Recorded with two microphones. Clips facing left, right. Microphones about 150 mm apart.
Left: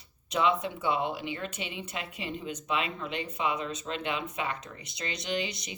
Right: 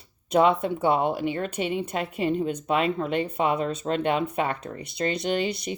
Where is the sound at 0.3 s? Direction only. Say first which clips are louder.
Right 7 dB; 50° right (ahead or behind).